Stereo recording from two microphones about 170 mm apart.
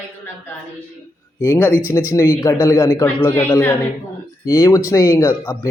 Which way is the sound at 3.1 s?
10° left (ahead or behind).